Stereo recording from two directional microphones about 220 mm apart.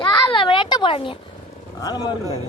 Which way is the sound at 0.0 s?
20° left (ahead or behind).